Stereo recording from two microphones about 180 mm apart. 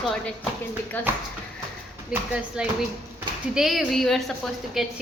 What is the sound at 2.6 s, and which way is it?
A woman's voice, 5° right (ahead or behind).